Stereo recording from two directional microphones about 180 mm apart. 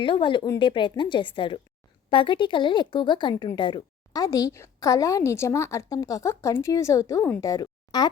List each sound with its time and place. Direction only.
0.0 s a woman's voice: 25° left (ahead or behind)